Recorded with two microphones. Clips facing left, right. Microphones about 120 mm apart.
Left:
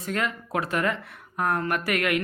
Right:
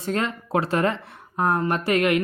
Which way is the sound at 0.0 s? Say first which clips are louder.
Right 3 dB; 30° right (ahead or behind).